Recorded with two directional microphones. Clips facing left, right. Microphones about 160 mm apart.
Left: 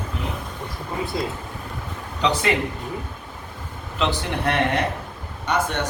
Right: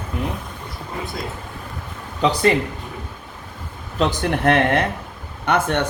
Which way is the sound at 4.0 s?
45° right (ahead or behind).